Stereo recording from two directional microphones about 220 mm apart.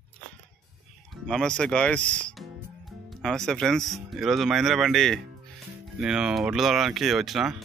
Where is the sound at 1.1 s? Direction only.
Centre (ahead or behind).